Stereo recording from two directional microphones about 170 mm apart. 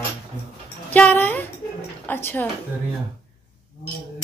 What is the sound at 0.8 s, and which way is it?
A woman's voice, 10° left (ahead or behind).